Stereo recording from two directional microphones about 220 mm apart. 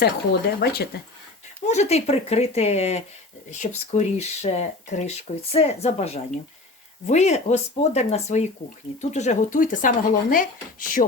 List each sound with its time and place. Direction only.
0.6 s speech: 45° left (ahead or behind)
1.6 s speech: 30° left (ahead or behind)